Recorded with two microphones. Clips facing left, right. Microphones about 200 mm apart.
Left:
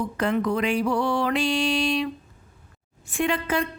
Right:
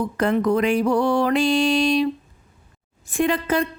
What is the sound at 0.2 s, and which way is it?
Music, 45° right (ahead or behind).